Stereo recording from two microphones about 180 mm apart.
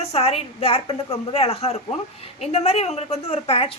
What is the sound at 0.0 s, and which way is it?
A woman's voice, 35° left (ahead or behind).